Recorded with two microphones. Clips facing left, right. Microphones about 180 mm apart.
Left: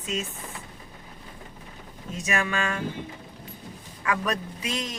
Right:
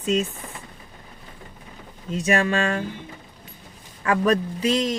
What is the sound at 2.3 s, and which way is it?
Speech, 30° right (ahead or behind).